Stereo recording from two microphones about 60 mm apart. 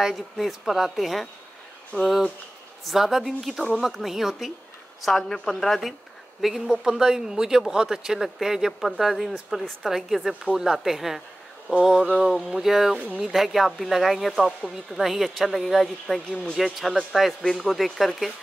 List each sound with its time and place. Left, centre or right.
0.0 s speech: centre
2.8 s speech: centre
5.0 s speech: centre
12.9 s speech: right
13.2 s speech: centre